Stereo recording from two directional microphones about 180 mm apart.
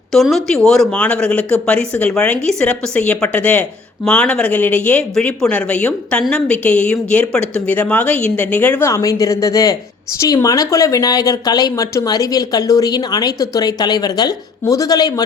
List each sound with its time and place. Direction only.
0.1 s a woman's voice: centre (ahead or behind); by 15.2 s 20° left (ahead or behind)